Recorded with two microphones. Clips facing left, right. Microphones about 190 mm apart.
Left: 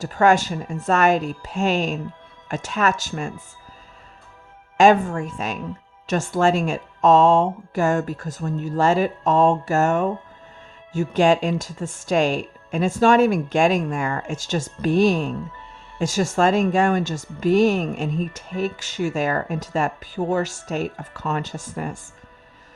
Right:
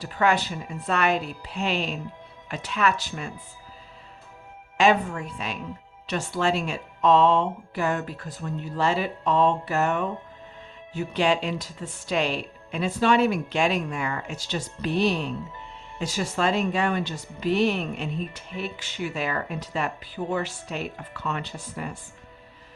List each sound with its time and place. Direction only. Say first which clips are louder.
0.0 s speech: left 6 dB; 45° left (ahead or behind)
4.8 s speech: left 6 dB; 45° left (ahead or behind)